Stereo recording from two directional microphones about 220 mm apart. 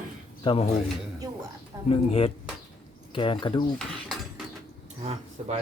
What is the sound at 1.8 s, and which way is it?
Speech, 25° left (ahead or behind).